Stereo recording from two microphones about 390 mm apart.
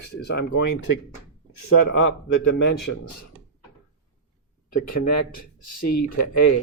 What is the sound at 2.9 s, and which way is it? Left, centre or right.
Speech, left.